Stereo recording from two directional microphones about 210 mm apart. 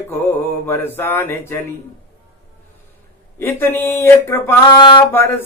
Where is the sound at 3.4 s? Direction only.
10° left (ahead or behind).